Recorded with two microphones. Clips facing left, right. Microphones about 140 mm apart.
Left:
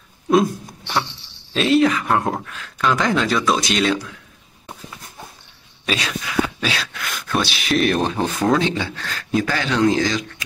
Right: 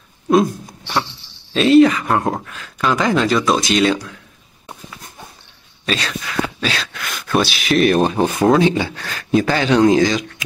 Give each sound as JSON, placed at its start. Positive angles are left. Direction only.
{"t": 0.3, "sound": "a sound", "side_deg": 0}
{"t": 1.5, "sound": "speech", "side_deg": 0}
{"t": 5.9, "sound": "speech", "side_deg": 5}
{"t": 8.2, "sound": "speech", "side_deg": -15}